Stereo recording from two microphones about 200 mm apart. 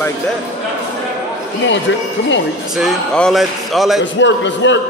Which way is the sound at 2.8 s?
Centre (ahead or behind).